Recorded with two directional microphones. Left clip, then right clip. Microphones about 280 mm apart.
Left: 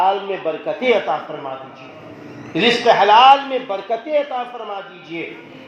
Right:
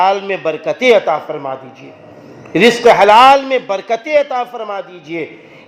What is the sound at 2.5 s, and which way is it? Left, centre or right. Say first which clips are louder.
A man's voice: right 6 dB; right.